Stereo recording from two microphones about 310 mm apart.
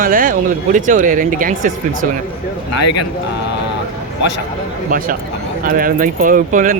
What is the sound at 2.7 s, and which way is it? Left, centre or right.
Speech, left.